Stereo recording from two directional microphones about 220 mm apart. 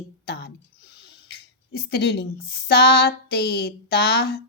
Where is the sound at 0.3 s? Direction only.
45° left (ahead or behind).